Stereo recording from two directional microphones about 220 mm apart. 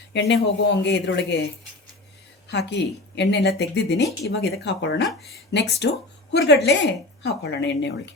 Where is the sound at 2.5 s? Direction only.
50° left (ahead or behind).